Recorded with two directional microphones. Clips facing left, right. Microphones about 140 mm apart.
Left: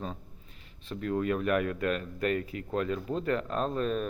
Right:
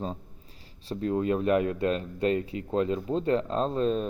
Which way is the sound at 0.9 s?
30° right (ahead or behind).